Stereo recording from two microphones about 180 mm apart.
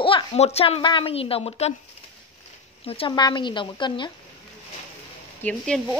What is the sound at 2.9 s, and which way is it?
Speech, 30° left (ahead or behind).